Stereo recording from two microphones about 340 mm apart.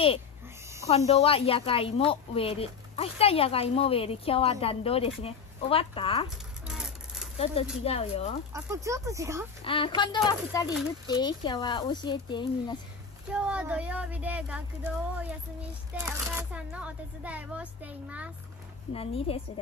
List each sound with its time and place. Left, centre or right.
0.8 s a woman's voice: centre
6.3 s a sound: centre
7.8 s a woman's voice: centre
8.5 s speech: centre
9.7 s a woman's voice: centre
13.3 s speech: centre
18.9 s a woman's voice: centre